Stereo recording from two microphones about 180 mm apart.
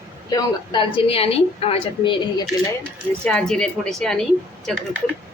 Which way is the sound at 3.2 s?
5° left (ahead or behind).